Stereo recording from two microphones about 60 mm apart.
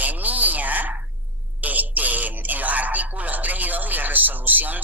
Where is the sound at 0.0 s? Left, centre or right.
Right.